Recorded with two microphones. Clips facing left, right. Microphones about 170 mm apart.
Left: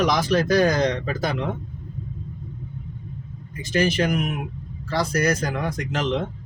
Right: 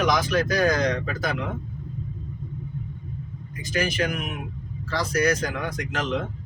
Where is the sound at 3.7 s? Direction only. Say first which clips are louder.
Left 4 dB; 30° left (ahead or behind).